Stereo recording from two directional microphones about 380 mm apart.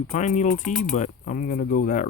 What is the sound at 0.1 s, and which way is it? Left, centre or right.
Speech, centre.